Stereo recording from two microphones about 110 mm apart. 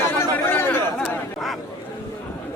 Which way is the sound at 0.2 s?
20° left (ahead or behind).